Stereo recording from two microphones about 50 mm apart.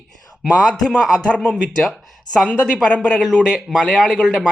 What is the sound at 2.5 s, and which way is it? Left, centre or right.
Speech, centre.